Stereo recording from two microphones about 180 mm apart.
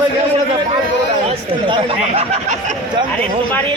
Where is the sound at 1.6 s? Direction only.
30° right (ahead or behind).